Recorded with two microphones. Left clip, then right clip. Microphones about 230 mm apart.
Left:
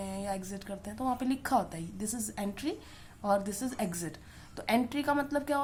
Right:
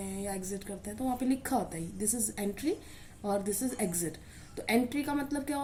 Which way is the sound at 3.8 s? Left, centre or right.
Left.